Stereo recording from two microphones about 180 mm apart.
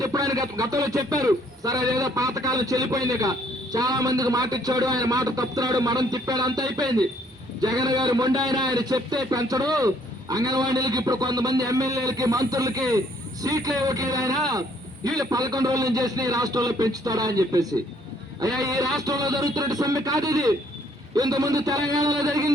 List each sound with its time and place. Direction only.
0.0 s speech: 20° right (ahead or behind)